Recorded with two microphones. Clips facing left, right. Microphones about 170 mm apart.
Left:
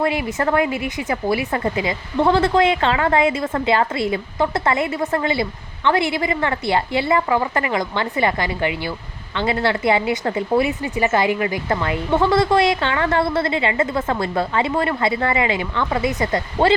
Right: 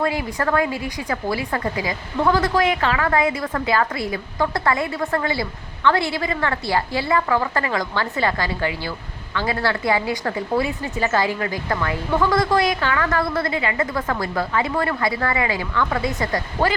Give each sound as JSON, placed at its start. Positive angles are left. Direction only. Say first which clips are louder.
{"t": 0.0, "sound": "speech", "louder": "left 2 dB", "side_deg": 20}